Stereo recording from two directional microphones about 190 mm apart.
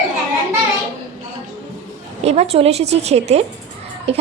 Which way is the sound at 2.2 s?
30° right (ahead or behind).